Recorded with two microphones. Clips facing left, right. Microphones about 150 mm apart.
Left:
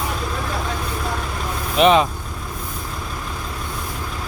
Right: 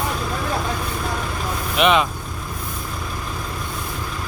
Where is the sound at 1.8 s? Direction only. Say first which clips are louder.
Left 3 dB; 35° left (ahead or behind).